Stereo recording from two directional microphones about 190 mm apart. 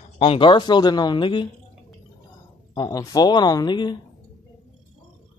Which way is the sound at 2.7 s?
20° left (ahead or behind).